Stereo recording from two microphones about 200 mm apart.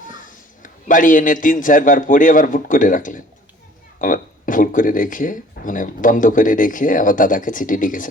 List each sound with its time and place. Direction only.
0.3 s a man's voice: 40° left (ahead or behind)